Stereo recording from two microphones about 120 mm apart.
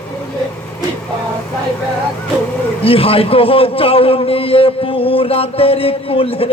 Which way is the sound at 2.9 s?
50° left (ahead or behind).